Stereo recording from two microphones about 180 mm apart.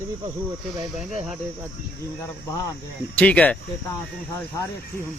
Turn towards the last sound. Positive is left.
turn(degrees=5)  # may be behind; listen again after turning